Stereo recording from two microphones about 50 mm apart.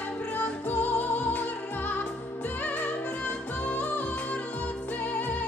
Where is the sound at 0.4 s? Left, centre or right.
Left.